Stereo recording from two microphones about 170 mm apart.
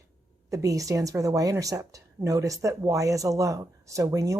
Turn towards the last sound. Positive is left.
turn(degrees=-20)  # may be behind; listen again after turning